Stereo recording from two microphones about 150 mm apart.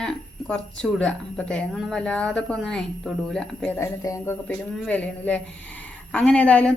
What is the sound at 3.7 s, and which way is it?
A woman's voice, 20° left (ahead or behind).